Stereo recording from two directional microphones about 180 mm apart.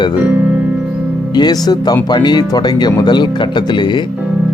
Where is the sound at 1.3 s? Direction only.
25° left (ahead or behind).